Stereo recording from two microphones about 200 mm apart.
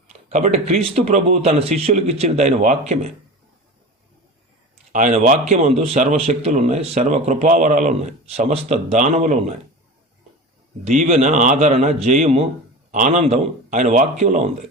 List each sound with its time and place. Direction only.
0.1 s a man's voice: 35° right (ahead or behind)
4.9 s a man's voice: 40° right (ahead or behind)
10.8 s a man's voice: 35° right (ahead or behind)